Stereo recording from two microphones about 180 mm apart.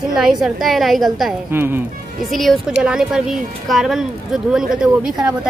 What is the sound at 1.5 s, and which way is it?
Speech, 10° right (ahead or behind).